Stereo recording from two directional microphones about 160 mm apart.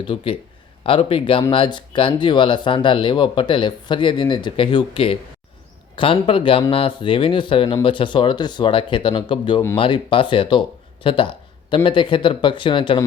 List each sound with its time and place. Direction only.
0.0 s speech: 35° left (ahead or behind)